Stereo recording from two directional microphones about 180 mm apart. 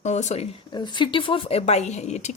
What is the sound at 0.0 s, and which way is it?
Speech, 40° left (ahead or behind).